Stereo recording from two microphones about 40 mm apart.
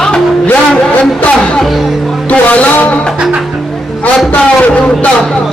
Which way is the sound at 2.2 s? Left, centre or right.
Left.